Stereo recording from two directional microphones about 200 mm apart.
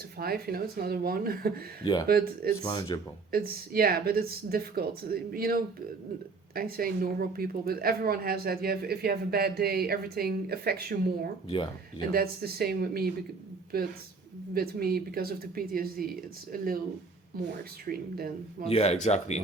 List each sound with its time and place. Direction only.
0.2 s a woman's voice: 50° right (ahead or behind)
1.8 s speech: 20° left (ahead or behind)
2.0 s a woman's voice: 50° right (ahead or behind)
2.6 s speech: 20° left (ahead or behind)
3.3 s a woman's voice: 50° right (ahead or behind)
11.4 s speech: 25° left (ahead or behind)
11.9 s a woman's voice: 50° right (ahead or behind)
17.6 s a woman's voice: 50° right (ahead or behind)
18.7 s speech: 30° left (ahead or behind)